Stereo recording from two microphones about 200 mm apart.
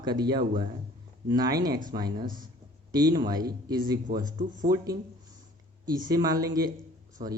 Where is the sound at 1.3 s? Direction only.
20° right (ahead or behind).